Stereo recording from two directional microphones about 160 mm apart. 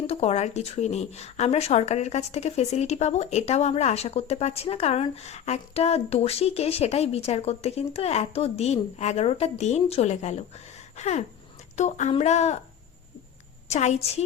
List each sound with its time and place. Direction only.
0.1 s speech: 40° left (ahead or behind)
13.7 s speech: 45° left (ahead or behind)